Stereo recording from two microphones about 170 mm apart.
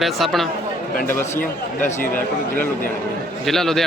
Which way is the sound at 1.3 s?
50° left (ahead or behind).